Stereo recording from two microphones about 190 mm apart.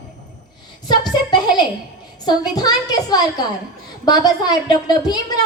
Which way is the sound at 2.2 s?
20° left (ahead or behind).